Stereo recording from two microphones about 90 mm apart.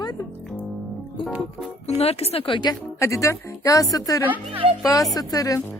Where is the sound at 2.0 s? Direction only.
85° left.